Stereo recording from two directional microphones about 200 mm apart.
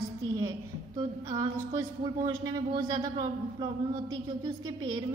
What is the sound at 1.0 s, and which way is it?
Speech, 20° right (ahead or behind).